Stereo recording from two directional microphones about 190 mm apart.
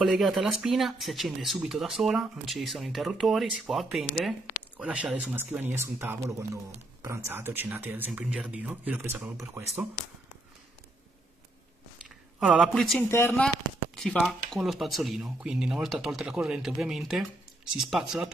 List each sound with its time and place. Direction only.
0.0 s speech: centre (ahead or behind)
12.4 s speech: centre (ahead or behind)
13.1 s speech: 10° left (ahead or behind)
13.9 s speech: centre (ahead or behind)